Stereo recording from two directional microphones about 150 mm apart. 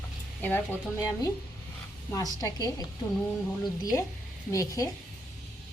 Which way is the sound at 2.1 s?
25° left (ahead or behind).